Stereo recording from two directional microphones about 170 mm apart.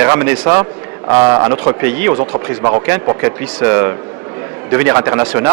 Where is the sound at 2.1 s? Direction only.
20° right (ahead or behind).